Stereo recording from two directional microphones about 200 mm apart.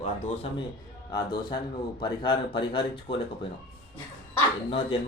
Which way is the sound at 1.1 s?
20° left (ahead or behind).